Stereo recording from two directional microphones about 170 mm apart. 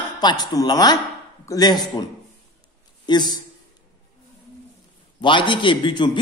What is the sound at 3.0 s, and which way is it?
Speech, 25° left (ahead or behind).